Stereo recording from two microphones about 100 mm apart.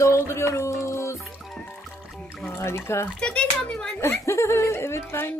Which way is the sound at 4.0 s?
30° left (ahead or behind).